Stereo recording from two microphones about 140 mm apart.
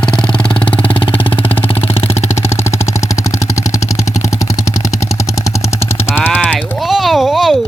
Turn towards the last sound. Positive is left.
turn(degrees=0)  # may be behind; listen again after turning